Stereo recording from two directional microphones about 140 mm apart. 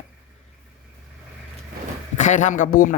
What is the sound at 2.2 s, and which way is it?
Speech, 60° left (ahead or behind).